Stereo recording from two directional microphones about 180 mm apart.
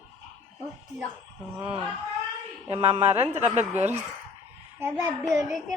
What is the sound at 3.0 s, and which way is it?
Speech, 35° right (ahead or behind).